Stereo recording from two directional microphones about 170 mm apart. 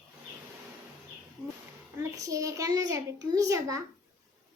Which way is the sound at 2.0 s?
20° right (ahead or behind).